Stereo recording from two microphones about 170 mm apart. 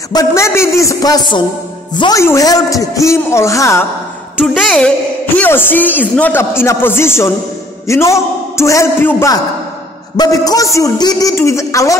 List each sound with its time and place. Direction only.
0.1 s a man's voice: 20° left (ahead or behind)
4.4 s a woman's voice: centre (ahead or behind); by 12.0 s 20° left (ahead or behind)